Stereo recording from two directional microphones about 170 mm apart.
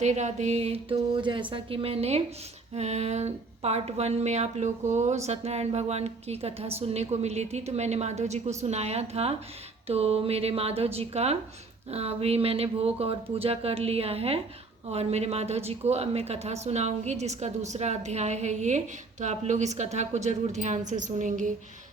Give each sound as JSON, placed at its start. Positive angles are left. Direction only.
{"t": 0.0, "sound": "a woman's voice", "side_deg": -45}